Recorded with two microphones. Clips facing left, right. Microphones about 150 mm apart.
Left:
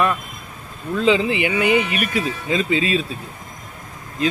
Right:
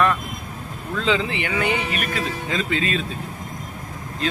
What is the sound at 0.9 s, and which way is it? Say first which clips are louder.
Speech: left 5 dB; 10° left (ahead or behind).